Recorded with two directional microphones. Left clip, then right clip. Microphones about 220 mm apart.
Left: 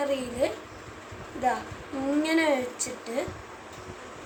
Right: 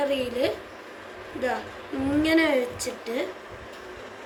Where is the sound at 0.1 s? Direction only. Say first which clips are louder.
Right 2 dB; 20° left (ahead or behind).